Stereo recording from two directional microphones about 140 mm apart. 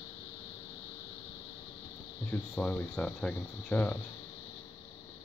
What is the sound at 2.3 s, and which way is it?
Speech, 10° left (ahead or behind).